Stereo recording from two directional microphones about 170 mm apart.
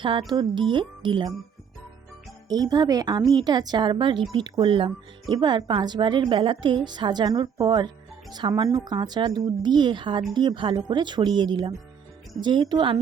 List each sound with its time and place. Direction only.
0.0 s a woman's voice: 30° right (ahead or behind)
2.5 s a woman's voice: 25° right (ahead or behind)